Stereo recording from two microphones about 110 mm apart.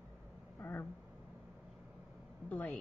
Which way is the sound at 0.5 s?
20° left (ahead or behind).